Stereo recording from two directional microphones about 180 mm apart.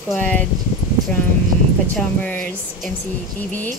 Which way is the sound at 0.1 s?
5° left (ahead or behind).